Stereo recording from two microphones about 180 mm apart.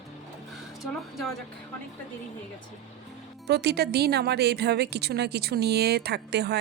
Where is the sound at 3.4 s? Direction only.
65° right (ahead or behind).